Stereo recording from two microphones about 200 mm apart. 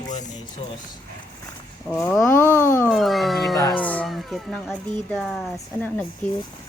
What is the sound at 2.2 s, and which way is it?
Speech, 10° left (ahead or behind).